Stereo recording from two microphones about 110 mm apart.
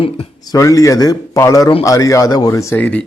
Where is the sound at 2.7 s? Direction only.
15° left (ahead or behind).